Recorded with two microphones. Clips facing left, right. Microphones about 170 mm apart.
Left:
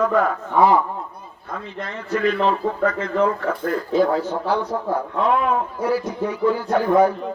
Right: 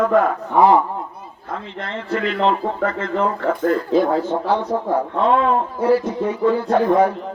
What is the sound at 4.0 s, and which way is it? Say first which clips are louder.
A man's voice: right 1 dB; 25° right (ahead or behind).